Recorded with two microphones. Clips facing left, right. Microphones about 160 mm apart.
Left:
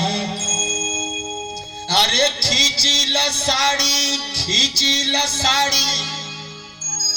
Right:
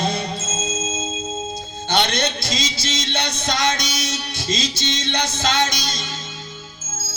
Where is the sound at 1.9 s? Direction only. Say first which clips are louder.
Left 1 dB; 30° left (ahead or behind).